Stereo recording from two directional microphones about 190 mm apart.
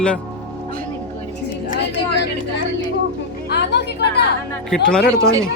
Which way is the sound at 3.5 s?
60° left (ahead or behind).